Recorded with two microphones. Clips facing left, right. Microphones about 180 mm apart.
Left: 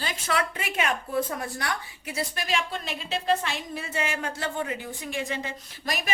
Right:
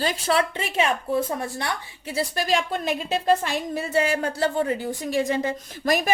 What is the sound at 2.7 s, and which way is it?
A woman's voice, 50° right (ahead or behind).